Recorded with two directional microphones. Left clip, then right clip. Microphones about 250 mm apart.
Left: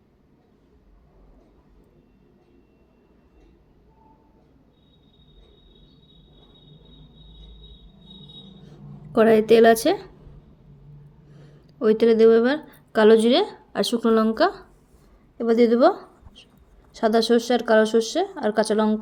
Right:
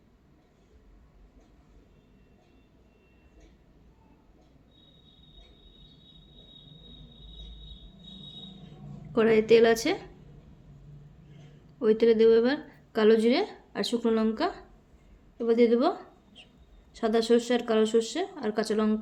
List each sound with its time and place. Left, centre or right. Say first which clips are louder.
9.1 s a woman's voice: left 5 dB; left
11.8 s a woman's voice: left 5 dB; left